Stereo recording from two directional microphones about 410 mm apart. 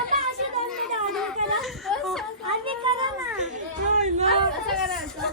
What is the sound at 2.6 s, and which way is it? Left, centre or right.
Children playing, centre.